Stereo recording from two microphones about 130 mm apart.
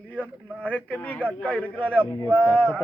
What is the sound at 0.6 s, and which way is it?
Speech, 10° left (ahead or behind).